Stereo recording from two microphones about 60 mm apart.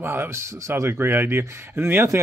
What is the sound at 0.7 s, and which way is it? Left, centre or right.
Speech, right.